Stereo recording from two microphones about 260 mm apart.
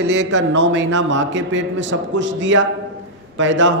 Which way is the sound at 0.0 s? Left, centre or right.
Right.